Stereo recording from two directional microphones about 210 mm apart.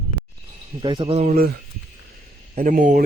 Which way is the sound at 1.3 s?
45° right (ahead or behind).